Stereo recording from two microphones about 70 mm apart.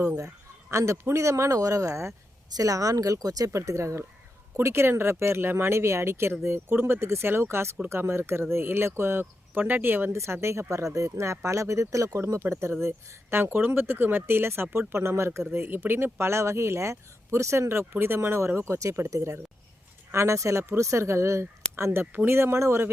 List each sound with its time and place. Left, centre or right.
0.7 s speech: right
3.5 s speech: right
12.2 s speech: right